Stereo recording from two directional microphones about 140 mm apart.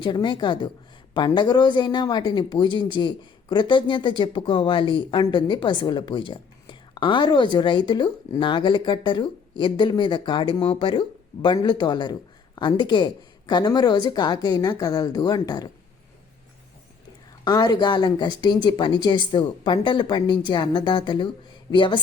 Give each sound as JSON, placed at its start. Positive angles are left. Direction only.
{"t": 0.0, "sound": "a woman's voice", "side_deg": 30}
{"t": 17.4, "sound": "speech", "side_deg": 30}